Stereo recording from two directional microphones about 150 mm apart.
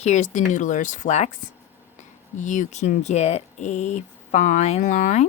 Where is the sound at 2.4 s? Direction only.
55° left (ahead or behind).